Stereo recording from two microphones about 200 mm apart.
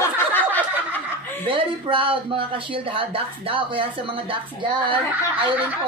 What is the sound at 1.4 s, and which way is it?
Speech, 25° right (ahead or behind).